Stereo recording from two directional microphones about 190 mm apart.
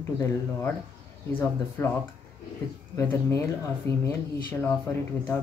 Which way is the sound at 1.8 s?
10° left (ahead or behind).